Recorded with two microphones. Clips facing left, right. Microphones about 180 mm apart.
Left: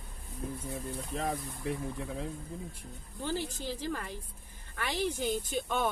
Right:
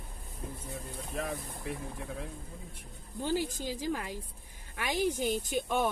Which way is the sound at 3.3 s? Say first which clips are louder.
Right 4 dB; 10° right (ahead or behind).